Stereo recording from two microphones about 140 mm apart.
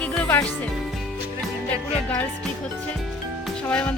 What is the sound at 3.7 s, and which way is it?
Speech, 10° left (ahead or behind).